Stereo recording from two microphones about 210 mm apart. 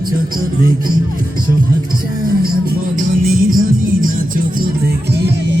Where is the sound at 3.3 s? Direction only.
40° right (ahead or behind).